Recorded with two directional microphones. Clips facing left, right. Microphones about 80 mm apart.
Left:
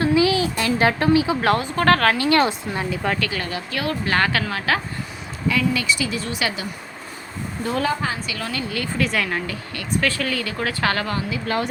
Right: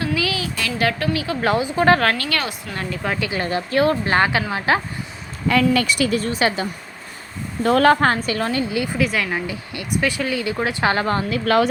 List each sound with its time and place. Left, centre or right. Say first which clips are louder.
0.0 s a sound: left 5 dB; left
1.4 s speech: right 1 dB; centre
2.1 s speech: left 7 dB; left
3.2 s speech: right 3 dB; right
5.5 s speech: right 4 dB; right
7.6 s speech: right 8 dB; right
8.7 s speech: right 4 dB; centre
9.0 s speech: left 1 dB; centre
9.5 s speech: right 1 dB; centre
11.0 s a woman's voice: right 5 dB; right
11.4 s speech: right 8 dB; right